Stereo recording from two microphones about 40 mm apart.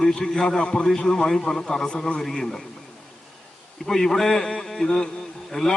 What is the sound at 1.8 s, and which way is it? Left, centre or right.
Speech, left.